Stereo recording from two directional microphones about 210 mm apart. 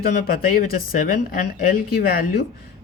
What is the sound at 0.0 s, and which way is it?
Speech, 45° left (ahead or behind).